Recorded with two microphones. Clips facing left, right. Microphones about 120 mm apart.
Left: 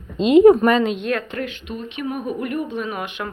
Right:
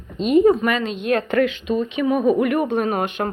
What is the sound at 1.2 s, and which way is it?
Speech, 70° right (ahead or behind).